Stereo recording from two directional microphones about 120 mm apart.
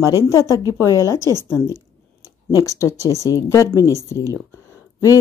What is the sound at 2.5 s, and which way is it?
Speech, 25° left (ahead or behind).